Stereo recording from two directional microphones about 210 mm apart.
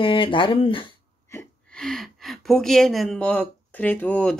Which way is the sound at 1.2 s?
10° left (ahead or behind).